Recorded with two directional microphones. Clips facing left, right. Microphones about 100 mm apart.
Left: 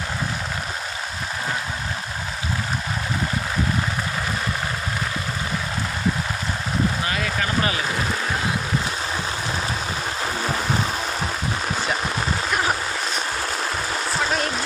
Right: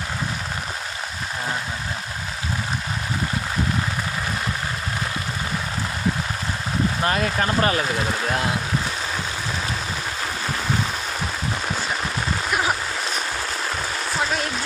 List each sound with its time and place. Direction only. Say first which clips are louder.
7.0 s speech: right 3 dB; 45° right (ahead or behind)